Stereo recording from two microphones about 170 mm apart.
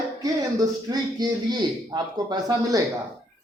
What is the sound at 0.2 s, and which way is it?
A man's voice, 20° right (ahead or behind).